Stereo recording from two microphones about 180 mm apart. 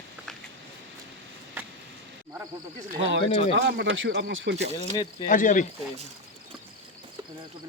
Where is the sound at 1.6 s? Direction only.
10° right (ahead or behind).